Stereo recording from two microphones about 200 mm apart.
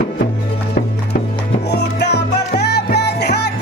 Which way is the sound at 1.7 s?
55° left (ahead or behind).